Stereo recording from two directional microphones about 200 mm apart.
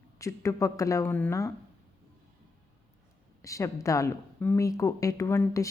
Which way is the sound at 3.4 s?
15° left (ahead or behind).